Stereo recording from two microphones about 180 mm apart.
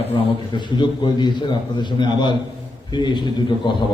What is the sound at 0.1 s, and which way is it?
A man's voice, 25° left (ahead or behind).